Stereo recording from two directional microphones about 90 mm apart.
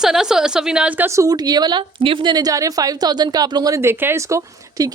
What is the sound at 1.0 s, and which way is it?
Speech, 35° right (ahead or behind).